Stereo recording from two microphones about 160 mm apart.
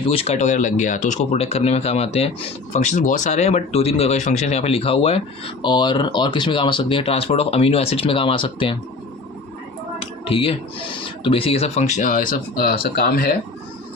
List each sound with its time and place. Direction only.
0.1 s speech: 40° left (ahead or behind)
2.9 s speech: 50° left (ahead or behind); by 8.7 s 35° left (ahead or behind)
10.0 s speech: 35° left (ahead or behind); by 13.3 s 70° left (ahead or behind)